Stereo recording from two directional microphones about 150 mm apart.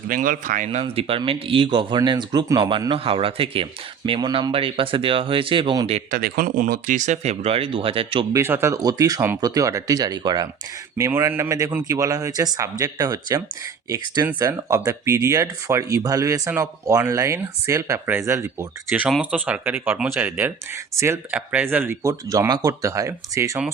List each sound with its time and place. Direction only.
0.1 s speech: 60° right (ahead or behind); by 6.0 s 35° right (ahead or behind)
6.1 s speech: 75° right (ahead or behind); by 8.3 s 35° right (ahead or behind)
8.3 s speech: 15° right (ahead or behind)
18.9 s speech: 5° right (ahead or behind); by 23.6 s 20° right (ahead or behind)